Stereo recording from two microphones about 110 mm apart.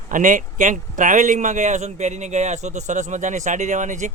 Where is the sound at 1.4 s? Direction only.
90° right.